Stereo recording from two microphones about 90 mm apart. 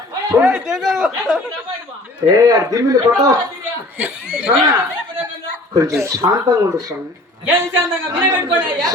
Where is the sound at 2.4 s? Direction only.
40° right (ahead or behind).